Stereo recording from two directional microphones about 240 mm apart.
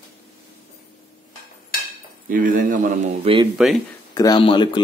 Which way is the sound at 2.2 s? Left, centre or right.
Right.